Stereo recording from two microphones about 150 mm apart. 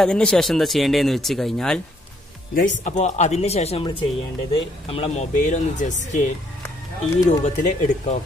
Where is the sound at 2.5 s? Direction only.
60° left (ahead or behind).